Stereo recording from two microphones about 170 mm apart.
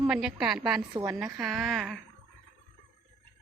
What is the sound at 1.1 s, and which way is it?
Speech, 5° right (ahead or behind).